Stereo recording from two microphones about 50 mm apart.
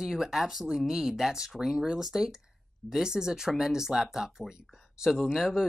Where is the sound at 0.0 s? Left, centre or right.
Centre.